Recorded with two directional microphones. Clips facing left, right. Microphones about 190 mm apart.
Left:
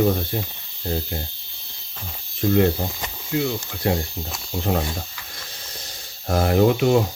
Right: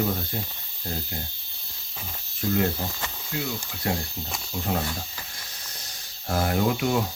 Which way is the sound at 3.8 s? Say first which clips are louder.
Left 6 dB; 25° left (ahead or behind).